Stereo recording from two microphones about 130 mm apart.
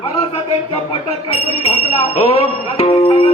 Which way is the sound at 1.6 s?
50° left (ahead or behind).